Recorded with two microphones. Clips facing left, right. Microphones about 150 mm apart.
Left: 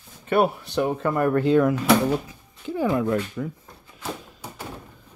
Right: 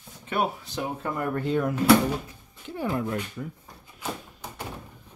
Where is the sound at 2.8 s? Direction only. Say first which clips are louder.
Left 5 dB; 90° left.